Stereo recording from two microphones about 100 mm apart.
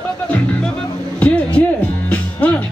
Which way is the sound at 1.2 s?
15° left (ahead or behind).